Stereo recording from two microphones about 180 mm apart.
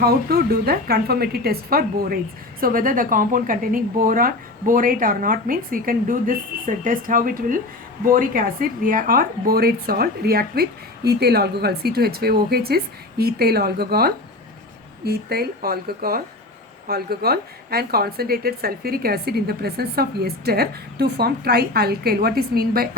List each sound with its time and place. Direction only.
0.0 s a woman's voice: 60° right (ahead or behind)